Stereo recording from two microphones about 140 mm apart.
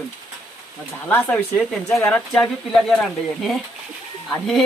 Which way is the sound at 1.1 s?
10° left (ahead or behind).